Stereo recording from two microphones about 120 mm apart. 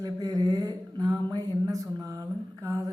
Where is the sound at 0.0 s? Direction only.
30° right (ahead or behind).